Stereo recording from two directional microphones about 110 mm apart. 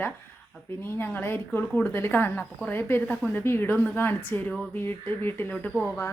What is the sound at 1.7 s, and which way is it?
Speech, 5° left (ahead or behind).